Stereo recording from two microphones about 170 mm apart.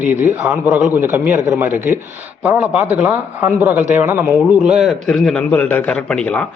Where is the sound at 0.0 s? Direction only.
10° right (ahead or behind).